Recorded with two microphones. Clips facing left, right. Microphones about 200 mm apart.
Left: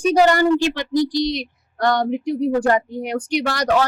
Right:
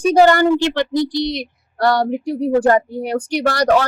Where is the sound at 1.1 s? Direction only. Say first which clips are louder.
Even; 55° right (ahead or behind).